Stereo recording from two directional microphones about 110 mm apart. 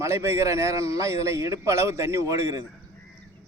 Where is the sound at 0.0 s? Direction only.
25° right (ahead or behind).